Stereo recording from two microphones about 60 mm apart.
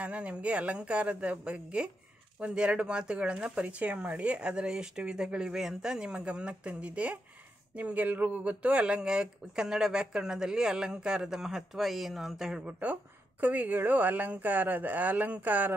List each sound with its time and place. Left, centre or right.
0.0 s speech: right
13.4 s speech: right